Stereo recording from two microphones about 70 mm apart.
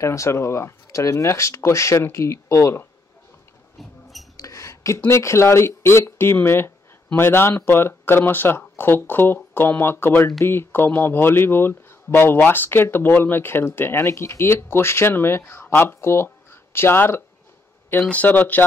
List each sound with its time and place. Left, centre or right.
0.0 s speech: left
4.4 s speech: left